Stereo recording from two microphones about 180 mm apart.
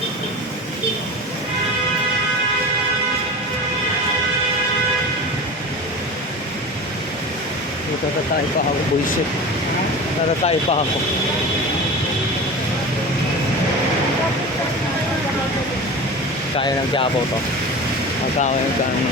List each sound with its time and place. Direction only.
10.4 s speech: 35° left (ahead or behind)
16.6 s speech: 30° left (ahead or behind)